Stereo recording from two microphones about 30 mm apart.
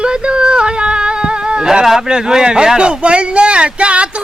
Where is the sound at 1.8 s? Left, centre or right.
Right.